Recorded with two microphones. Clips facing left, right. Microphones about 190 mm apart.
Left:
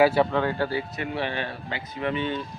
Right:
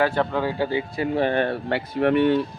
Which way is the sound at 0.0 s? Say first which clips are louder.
Left 2 dB; 5° left (ahead or behind).